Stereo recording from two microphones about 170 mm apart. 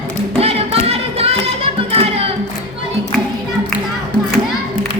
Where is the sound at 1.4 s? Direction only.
35° right (ahead or behind).